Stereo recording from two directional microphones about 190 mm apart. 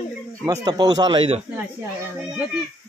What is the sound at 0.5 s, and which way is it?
Speech, 20° right (ahead or behind).